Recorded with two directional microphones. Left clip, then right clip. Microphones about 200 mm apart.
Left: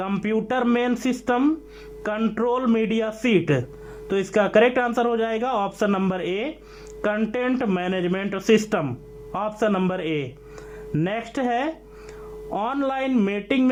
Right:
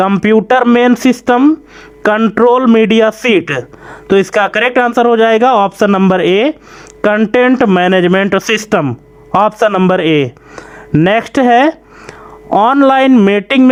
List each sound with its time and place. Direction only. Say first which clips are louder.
0.0 s a man's voice: right 15 dB; 40° right (ahead or behind)